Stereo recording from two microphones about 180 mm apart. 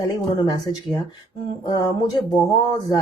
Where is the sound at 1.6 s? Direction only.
20° left (ahead or behind).